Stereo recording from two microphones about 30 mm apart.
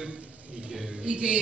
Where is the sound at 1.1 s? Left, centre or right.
Right.